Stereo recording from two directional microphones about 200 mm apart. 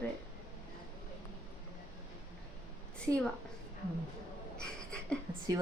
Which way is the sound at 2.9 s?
5° left (ahead or behind).